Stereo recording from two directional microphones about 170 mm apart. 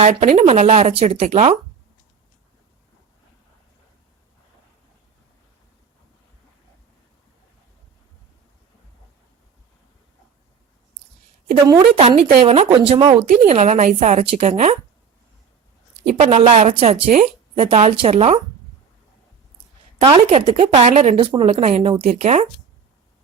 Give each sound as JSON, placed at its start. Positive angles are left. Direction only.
{"t": 0.0, "sound": "a woman's voice", "side_deg": -45}
{"t": 11.6, "sound": "a woman's voice", "side_deg": -20}
{"t": 11.9, "sound": "a woman's voice", "side_deg": -35}
{"t": 13.4, "sound": "a woman's voice", "side_deg": -40}
{"t": 16.0, "sound": "a woman's voice", "side_deg": -40}
{"t": 20.0, "sound": "a woman's voice", "side_deg": -35}